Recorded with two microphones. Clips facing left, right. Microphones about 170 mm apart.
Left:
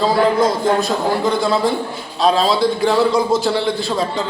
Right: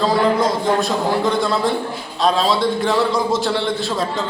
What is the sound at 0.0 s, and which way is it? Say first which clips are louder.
A man's voice: left 2 dB; centre (ahead or behind).